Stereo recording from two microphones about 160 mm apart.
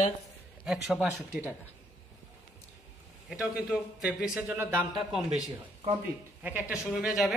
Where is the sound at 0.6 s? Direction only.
5° right (ahead or behind).